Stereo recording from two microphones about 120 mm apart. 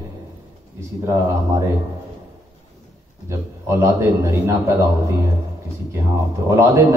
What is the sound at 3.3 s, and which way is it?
A man's voice, 25° right (ahead or behind).